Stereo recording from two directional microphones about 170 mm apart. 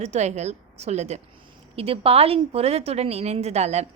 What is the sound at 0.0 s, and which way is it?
Speech, 40° right (ahead or behind).